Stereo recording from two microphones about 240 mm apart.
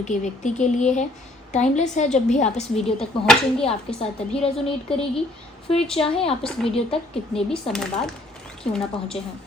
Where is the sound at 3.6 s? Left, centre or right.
Left.